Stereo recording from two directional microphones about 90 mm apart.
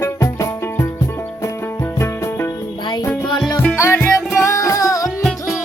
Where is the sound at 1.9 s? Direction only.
30° left (ahead or behind).